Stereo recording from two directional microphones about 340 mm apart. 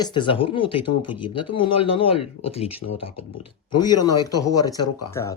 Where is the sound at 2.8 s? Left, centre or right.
Left.